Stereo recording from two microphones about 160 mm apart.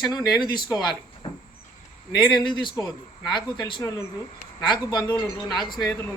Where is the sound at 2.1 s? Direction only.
25° left (ahead or behind).